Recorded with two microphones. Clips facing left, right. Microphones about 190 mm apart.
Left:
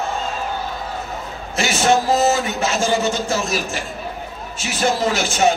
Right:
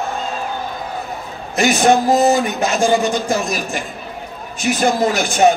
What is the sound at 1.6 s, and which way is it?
Speech, 15° right (ahead or behind).